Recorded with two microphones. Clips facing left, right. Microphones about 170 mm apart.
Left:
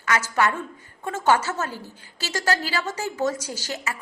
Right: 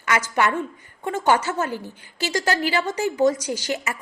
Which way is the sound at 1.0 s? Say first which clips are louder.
Right 1 dB; 20° right (ahead or behind).